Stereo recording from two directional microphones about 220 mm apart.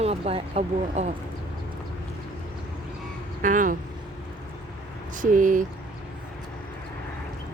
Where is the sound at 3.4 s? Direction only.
35° right (ahead or behind).